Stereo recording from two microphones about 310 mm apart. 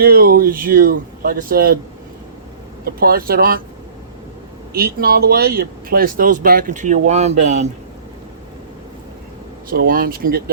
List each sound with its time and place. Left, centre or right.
0.0 s speech: right
2.8 s speech: right
4.7 s speech: right
9.6 s speech: right